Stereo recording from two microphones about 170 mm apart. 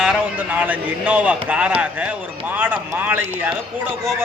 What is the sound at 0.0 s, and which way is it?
A man's voice, 5° right (ahead or behind).